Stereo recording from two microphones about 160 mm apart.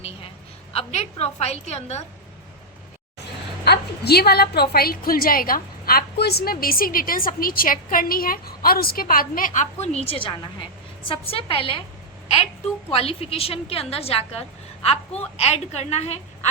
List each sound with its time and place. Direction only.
0.7 s a woman's voice: 40° left (ahead or behind)
3.6 s a woman's voice: 85° left; by 11.8 s 35° left (ahead or behind)
12.9 s a woman's voice: 40° left (ahead or behind)